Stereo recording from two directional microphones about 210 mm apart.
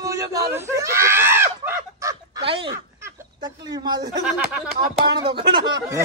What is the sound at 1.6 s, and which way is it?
Fowl, 10° right (ahead or behind).